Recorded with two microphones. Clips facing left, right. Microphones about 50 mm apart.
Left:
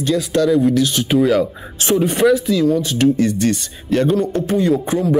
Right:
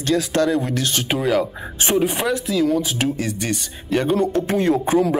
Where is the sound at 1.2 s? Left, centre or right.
Centre.